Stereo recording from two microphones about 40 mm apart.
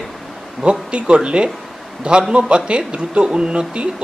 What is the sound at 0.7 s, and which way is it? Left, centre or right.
Speech, right.